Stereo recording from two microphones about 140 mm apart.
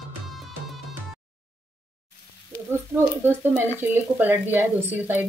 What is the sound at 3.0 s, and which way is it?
Speech, 15° right (ahead or behind).